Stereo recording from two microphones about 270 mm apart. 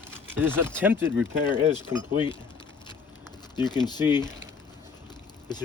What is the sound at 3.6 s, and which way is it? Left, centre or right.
Speech, centre.